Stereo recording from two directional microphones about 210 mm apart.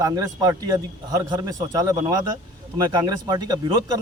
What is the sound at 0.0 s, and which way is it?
A man's voice, 15° right (ahead or behind).